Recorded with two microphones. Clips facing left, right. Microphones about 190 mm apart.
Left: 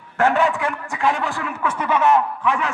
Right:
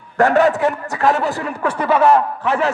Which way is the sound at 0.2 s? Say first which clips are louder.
Right 5 dB; 40° right (ahead or behind).